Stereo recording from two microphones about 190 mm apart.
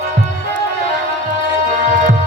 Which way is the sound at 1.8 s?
45° right (ahead or behind).